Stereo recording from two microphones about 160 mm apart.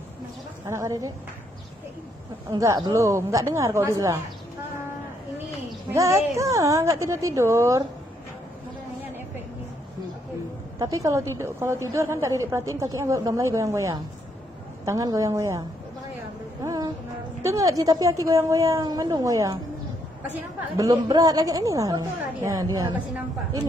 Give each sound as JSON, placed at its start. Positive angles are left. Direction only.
{"t": 0.7, "sound": "a woman's voice", "side_deg": -20}
{"t": 2.5, "sound": "a woman's voice", "side_deg": -20}
{"t": 5.9, "sound": "a woman's voice", "side_deg": -20}
{"t": 10.8, "sound": "a woman's voice", "side_deg": -20}
{"t": 16.6, "sound": "music", "side_deg": -20}
{"t": 17.4, "sound": "a woman's voice", "side_deg": -20}
{"t": 20.7, "sound": "a woman's voice", "side_deg": -20}